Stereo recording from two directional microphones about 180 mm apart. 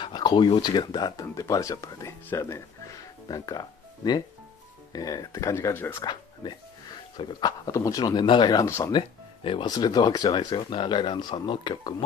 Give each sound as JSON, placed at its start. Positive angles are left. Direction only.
{"t": 0.0, "sound": "speech", "side_deg": 25}
{"t": 6.0, "sound": "speech", "side_deg": 25}
{"t": 9.4, "sound": "speech", "side_deg": 30}